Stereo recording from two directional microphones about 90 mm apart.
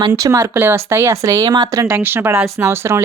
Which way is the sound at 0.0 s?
40° right (ahead or behind).